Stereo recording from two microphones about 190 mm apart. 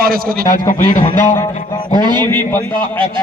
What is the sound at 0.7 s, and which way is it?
Speech, 40° left (ahead or behind).